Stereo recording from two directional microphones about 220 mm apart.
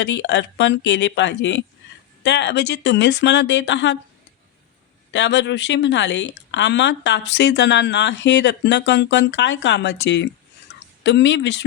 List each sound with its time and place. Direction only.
0.0 s speech: 55° left (ahead or behind)
5.1 s speech: 50° left (ahead or behind)